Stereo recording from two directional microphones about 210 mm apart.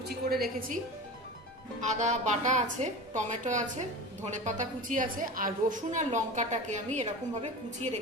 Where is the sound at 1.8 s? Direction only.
35° right (ahead or behind).